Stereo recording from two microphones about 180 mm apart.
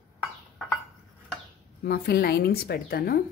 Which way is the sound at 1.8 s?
60° left (ahead or behind).